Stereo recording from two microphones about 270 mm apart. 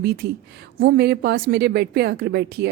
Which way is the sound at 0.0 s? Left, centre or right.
Right.